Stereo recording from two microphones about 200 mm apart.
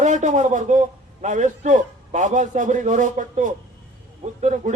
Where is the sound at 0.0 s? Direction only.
40° right (ahead or behind).